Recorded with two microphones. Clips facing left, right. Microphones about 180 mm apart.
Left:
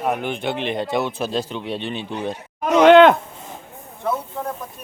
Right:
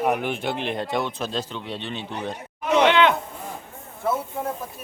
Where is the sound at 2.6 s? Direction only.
45° left (ahead or behind).